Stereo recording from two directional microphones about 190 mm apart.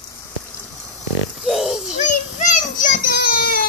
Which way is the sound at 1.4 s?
Centre (ahead or behind).